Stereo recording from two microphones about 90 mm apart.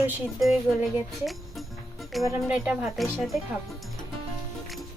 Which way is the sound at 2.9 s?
Centre (ahead or behind).